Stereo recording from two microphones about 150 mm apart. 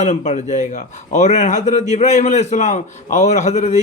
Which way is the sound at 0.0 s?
50° left (ahead or behind).